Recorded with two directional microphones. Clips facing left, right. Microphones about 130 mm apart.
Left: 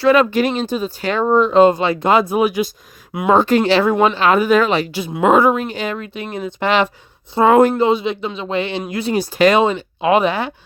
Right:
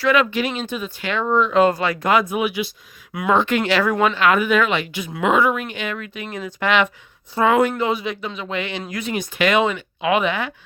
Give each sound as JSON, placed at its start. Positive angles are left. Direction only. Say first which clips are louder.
{"t": 0.0, "sound": "speech", "louder": "left 5 dB", "side_deg": 35}
{"t": 3.1, "sound": "speech", "louder": "left 4 dB", "side_deg": 25}
{"t": 3.3, "sound": "speech", "louder": "left 5 dB", "side_deg": 35}